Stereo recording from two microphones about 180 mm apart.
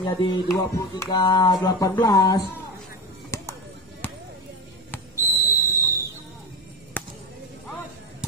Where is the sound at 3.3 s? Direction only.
15° left (ahead or behind).